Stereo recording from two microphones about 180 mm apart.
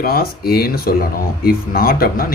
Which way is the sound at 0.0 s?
55° left (ahead or behind).